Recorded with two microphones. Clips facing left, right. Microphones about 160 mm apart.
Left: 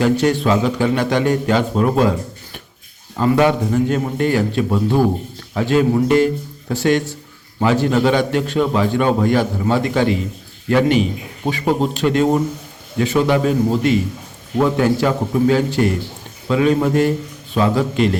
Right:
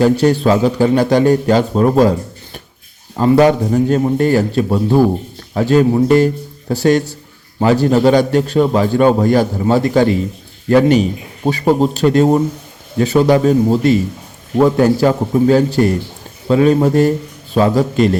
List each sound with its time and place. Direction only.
0.0 s a man's voice: 35° right (ahead or behind)